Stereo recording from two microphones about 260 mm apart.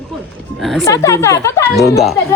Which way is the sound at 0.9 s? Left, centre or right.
Centre.